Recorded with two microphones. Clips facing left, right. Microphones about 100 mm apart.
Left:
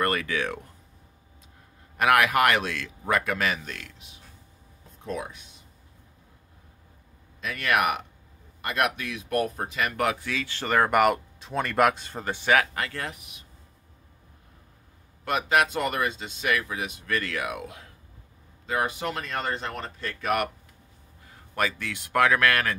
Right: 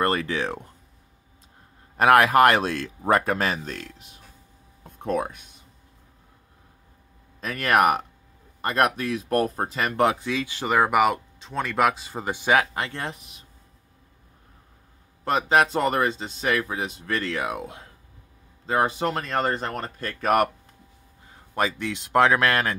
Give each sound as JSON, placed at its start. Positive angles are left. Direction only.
{"t": 0.0, "sound": "speech", "side_deg": -30}
{"t": 2.0, "sound": "speech", "side_deg": -35}
{"t": 4.9, "sound": "speech", "side_deg": -55}
{"t": 7.3, "sound": "speech", "side_deg": -40}
{"t": 15.2, "sound": "speech", "side_deg": -30}
{"t": 21.5, "sound": "speech", "side_deg": -20}